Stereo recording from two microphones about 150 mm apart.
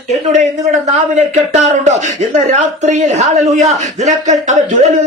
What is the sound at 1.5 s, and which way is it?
Speech, 50° right (ahead or behind).